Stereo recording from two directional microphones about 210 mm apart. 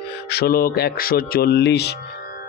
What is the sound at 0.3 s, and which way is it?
Mantra, 45° left (ahead or behind).